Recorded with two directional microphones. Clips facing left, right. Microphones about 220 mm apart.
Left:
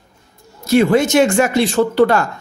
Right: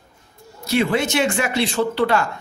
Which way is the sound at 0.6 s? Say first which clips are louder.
Left 7 dB; 45° left (ahead or behind).